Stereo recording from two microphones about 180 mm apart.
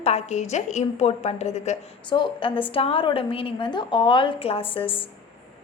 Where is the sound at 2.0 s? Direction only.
25° left (ahead or behind).